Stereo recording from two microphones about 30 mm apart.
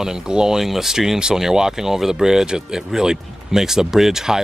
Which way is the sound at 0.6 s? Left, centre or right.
Centre.